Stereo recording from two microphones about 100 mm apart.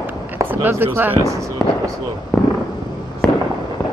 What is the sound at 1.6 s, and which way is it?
Speech, 5° left (ahead or behind).